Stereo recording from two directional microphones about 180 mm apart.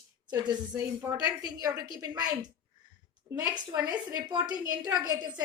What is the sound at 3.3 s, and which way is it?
A woman's voice, 20° right (ahead or behind).